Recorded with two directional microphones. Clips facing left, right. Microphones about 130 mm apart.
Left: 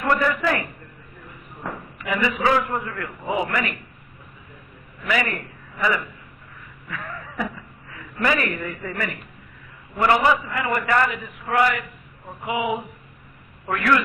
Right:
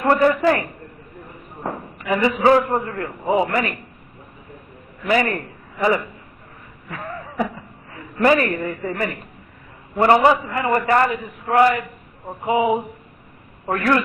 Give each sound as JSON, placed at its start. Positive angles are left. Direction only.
{"t": 0.0, "sound": "a man's voice", "side_deg": -35}
{"t": 1.6, "sound": "a man's voice", "side_deg": -35}
{"t": 5.0, "sound": "a man's voice", "side_deg": -35}
{"t": 6.9, "sound": "a sound", "side_deg": -35}
{"t": 10.0, "sound": "a man's voice", "side_deg": -35}